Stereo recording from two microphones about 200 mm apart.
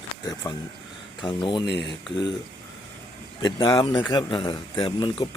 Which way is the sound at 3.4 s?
20° left (ahead or behind).